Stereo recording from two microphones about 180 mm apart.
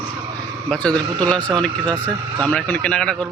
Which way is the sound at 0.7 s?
5° left (ahead or behind).